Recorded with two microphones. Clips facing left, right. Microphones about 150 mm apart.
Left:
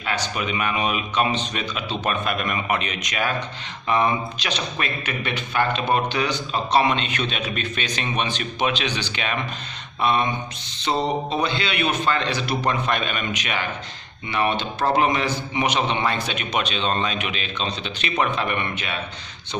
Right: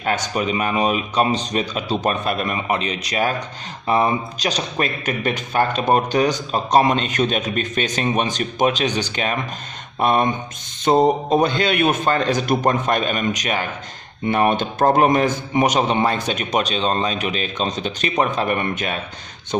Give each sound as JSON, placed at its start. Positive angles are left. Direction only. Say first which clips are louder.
{"t": 0.0, "sound": "a man's voice", "louder": "right 5 dB", "side_deg": -45}